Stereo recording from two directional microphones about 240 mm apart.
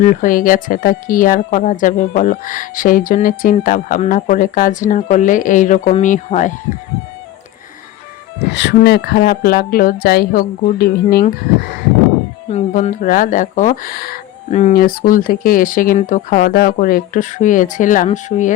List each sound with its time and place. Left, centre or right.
0.0 s speech: left
8.5 s speech: left
12.5 s speech: left